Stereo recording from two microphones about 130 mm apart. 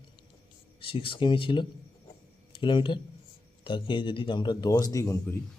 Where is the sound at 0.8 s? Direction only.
45° left (ahead or behind).